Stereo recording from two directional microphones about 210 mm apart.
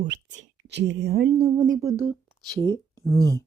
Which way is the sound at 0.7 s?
55° right (ahead or behind).